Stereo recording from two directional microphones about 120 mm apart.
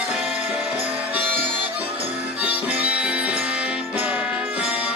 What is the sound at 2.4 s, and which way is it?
Music, 10° right (ahead or behind).